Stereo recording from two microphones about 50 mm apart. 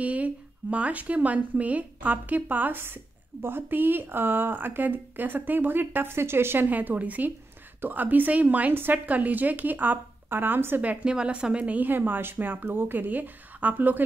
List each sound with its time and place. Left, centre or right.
0.0 s speech: right
6.7 s a woman's voice: right
10.8 s a woman's voice: right